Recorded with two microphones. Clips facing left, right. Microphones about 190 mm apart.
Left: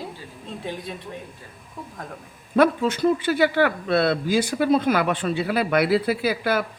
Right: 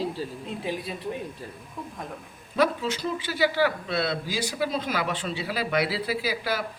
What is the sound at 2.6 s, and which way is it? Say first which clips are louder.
A man's voice: left 6 dB; 55° left (ahead or behind).